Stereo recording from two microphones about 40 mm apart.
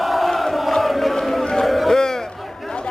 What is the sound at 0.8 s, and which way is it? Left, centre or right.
Chant, centre.